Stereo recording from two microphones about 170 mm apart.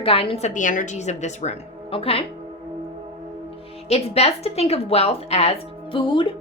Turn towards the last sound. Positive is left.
turn(degrees=30)  # may be behind; listen again after turning